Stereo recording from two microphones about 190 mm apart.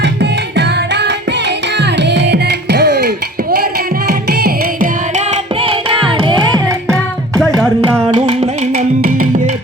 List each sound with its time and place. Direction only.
0.0 s tabla: 65° right (ahead or behind)
1.8 s music: 65° right (ahead or behind)
4.3 s music: 55° right (ahead or behind)
5.1 s carnatic music: 35° right (ahead or behind)
6.8 s music: 5° left (ahead or behind)
8.1 s carnatic music: 30° right (ahead or behind)
8.7 s music: 45° right (ahead or behind)